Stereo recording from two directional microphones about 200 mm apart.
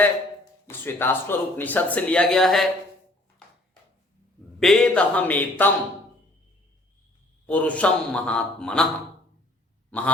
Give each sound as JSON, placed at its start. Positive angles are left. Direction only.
{"t": 0.7, "sound": "speech", "side_deg": 10}
{"t": 4.6, "sound": "speech", "side_deg": 5}
{"t": 7.4, "sound": "a man's voice", "side_deg": 5}
{"t": 9.9, "sound": "a sound", "side_deg": 5}